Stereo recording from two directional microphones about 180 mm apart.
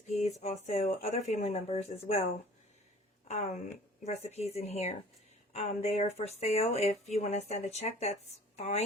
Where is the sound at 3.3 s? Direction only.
40° left (ahead or behind).